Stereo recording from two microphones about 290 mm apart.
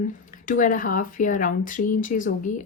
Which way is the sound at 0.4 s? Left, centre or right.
Left.